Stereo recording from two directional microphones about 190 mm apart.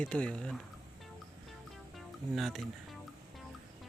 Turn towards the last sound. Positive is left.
turn(degrees=0)  # may be behind; listen again after turning